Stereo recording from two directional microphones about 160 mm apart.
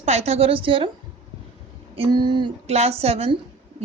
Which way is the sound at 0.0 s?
40° right (ahead or behind).